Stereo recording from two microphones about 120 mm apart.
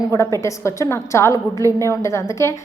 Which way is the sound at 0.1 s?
30° left (ahead or behind).